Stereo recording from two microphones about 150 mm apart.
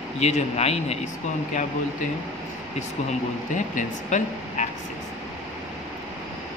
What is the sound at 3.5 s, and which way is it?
Speech, 55° left (ahead or behind).